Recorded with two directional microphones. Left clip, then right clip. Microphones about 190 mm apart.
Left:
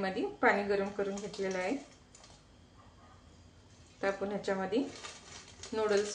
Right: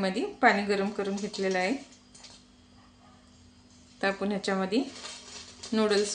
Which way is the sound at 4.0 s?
50° right (ahead or behind).